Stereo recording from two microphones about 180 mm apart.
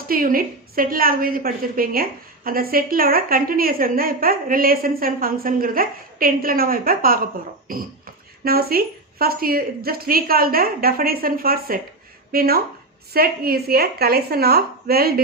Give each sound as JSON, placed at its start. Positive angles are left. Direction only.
{"t": 0.1, "sound": "a woman's voice", "side_deg": -55}